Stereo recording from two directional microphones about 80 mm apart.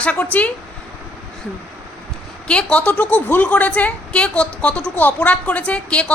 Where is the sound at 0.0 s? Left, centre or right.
Centre.